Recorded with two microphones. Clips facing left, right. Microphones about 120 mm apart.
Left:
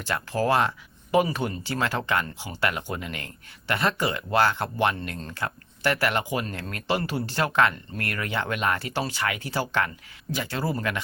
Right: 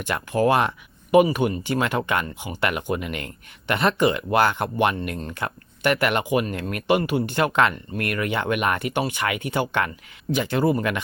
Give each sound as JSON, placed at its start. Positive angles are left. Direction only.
{"t": 0.0, "sound": "speech", "side_deg": -20}